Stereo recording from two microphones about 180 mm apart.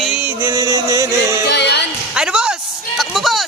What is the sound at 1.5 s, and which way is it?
Music, 70° left (ahead or behind).